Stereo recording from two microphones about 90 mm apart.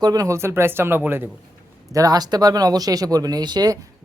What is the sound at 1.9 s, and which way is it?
Speech, 40° right (ahead or behind).